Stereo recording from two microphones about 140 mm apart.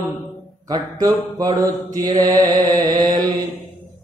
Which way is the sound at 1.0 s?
25° right (ahead or behind).